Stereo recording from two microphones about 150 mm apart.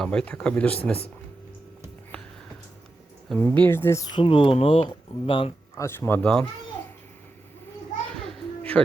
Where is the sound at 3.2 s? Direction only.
10° left (ahead or behind).